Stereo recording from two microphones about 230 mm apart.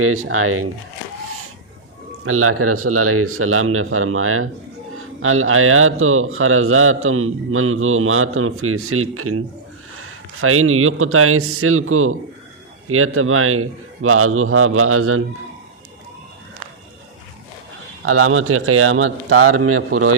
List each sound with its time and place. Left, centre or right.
0.0 s a man's voice: right
2.2 s a man's voice: right
18.0 s a man's voice: right